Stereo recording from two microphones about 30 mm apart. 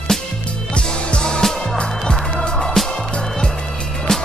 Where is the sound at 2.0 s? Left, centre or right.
Left.